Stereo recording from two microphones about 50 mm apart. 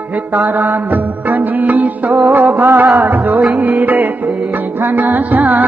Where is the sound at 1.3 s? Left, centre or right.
Right.